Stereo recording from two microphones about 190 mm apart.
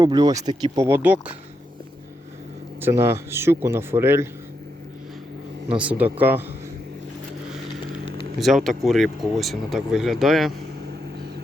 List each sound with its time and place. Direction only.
0.0 s speech: 20° right (ahead or behind)
2.8 s speech: 15° right (ahead or behind)
5.6 s speech: 5° right (ahead or behind)
8.4 s speech: centre (ahead or behind)